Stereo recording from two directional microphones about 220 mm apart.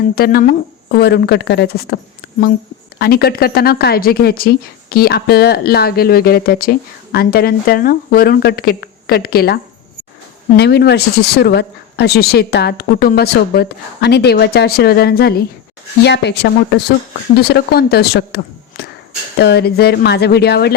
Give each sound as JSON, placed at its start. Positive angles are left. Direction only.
{"t": 0.2, "sound": "speech", "side_deg": 45}
{"t": 2.2, "sound": "a sound", "side_deg": 50}
{"t": 3.0, "sound": "speech", "side_deg": 45}
{"t": 10.6, "sound": "speech", "side_deg": 50}